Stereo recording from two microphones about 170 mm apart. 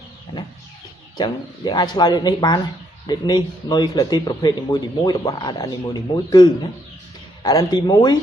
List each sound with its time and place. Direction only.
1.1 s speech: 25° left (ahead or behind)